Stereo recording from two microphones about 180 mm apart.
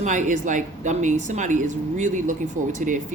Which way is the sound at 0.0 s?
45° right (ahead or behind).